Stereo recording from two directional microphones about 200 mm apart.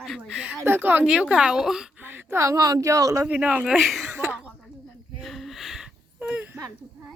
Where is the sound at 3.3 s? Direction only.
5° right (ahead or behind).